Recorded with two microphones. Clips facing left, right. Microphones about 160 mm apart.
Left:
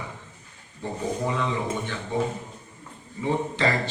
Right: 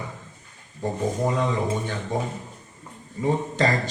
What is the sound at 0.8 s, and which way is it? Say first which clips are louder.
Speech: right 5 dB; 45° right (ahead or behind).